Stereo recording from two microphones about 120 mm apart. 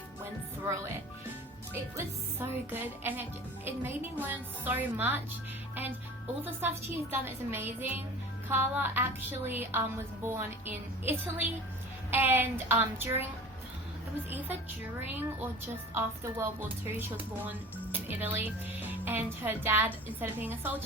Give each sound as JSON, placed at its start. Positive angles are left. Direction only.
{"t": 1.7, "sound": "a woman's voice", "side_deg": -20}
{"t": 6.4, "sound": "a woman's voice", "side_deg": -15}
{"t": 15.1, "sound": "a woman's voice", "side_deg": -15}